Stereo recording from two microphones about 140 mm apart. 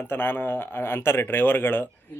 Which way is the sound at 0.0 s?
15° left (ahead or behind).